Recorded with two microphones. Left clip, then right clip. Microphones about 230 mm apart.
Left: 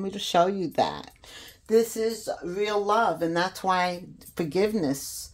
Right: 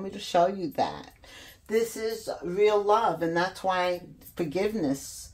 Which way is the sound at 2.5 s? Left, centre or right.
Left.